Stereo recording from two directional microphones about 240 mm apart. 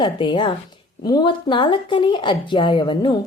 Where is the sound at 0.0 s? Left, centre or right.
Centre.